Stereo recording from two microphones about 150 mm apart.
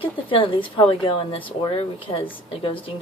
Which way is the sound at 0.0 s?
35° left (ahead or behind).